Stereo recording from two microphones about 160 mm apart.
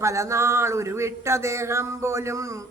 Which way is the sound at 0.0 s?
20° right (ahead or behind).